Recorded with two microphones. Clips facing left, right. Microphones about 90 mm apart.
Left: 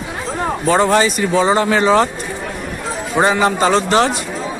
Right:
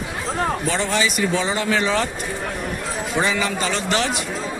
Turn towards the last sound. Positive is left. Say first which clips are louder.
# left 8 dB
turn(degrees=35)  # may be behind; listen again after turning